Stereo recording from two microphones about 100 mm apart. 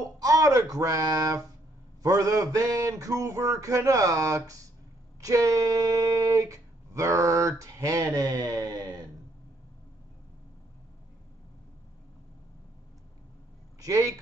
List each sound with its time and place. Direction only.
0.0 s a man's voice: 35° right (ahead or behind)
13.7 s speech: 35° right (ahead or behind)